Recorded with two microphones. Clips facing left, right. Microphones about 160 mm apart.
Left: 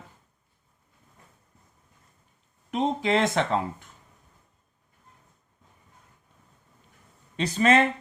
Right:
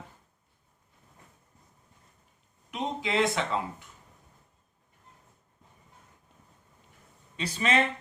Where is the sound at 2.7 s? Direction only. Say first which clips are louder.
Left 6 dB; 45° left (ahead or behind).